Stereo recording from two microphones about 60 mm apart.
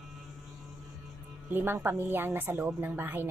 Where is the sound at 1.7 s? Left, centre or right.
Right.